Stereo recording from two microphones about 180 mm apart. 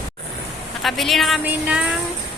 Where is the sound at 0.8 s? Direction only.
Centre (ahead or behind).